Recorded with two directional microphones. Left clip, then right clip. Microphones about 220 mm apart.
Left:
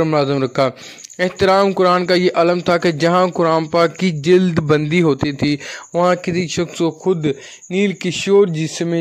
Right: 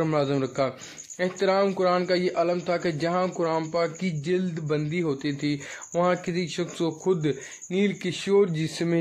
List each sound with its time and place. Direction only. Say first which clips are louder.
0.0 s a man's voice: left 9 dB; 40° left (ahead or behind)